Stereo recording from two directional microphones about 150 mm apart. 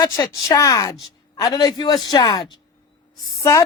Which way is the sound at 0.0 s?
25° left (ahead or behind).